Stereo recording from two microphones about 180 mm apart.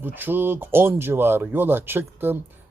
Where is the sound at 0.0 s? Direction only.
10° right (ahead or behind).